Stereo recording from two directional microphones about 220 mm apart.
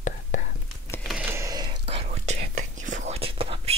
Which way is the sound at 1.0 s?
5° right (ahead or behind).